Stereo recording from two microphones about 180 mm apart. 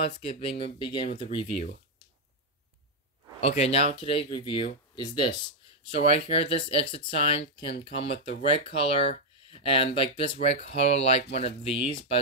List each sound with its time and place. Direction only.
0.1 s speech: 30° left (ahead or behind)
3.3 s speech: 35° left (ahead or behind)